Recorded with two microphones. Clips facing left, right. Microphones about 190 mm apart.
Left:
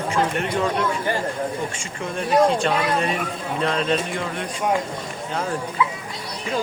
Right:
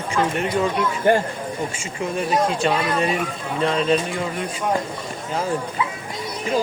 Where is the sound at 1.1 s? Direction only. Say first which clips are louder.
Right 8 dB; 50° right (ahead or behind).